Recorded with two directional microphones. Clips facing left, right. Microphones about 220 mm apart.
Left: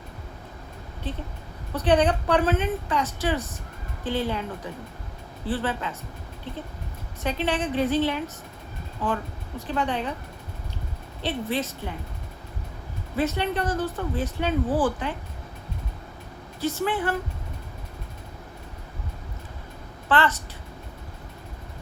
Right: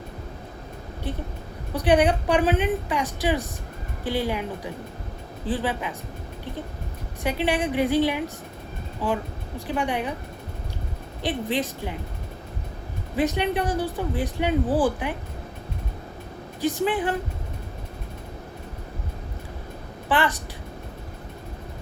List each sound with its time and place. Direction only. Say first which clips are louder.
1.1 s a woman's voice: right 2 dB; 15° right (ahead or behind)
7.2 s a woman's voice: right 2 dB; 15° right (ahead or behind)
11.2 s a woman's voice: right 2 dB; 15° right (ahead or behind)
13.1 s a woman's voice: right 2 dB; 15° right (ahead or behind)
16.6 s a woman's voice: right 2 dB; 15° right (ahead or behind)
20.1 s a woman's voice: even; 15° right (ahead or behind)